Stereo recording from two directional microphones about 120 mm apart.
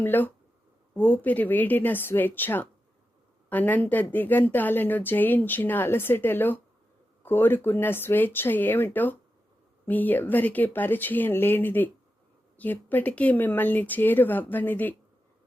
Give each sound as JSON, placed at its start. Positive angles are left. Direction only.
{"t": 0.0, "sound": "a woman's voice", "side_deg": 15}